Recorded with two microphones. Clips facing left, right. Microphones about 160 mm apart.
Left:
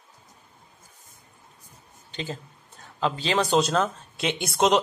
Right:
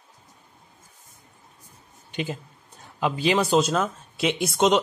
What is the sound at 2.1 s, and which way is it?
A man's voice, 10° right (ahead or behind).